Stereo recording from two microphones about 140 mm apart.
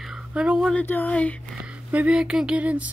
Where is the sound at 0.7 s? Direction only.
10° left (ahead or behind).